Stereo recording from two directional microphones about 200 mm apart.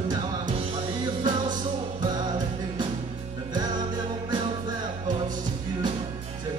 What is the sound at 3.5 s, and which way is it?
Music, 20° right (ahead or behind).